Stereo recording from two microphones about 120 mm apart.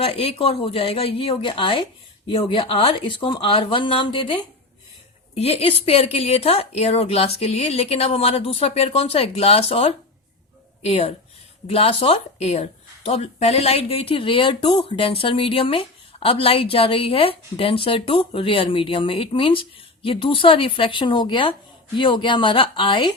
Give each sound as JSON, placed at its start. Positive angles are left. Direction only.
{"t": 0.0, "sound": "speech", "side_deg": 55}
{"t": 5.3, "sound": "speech", "side_deg": 60}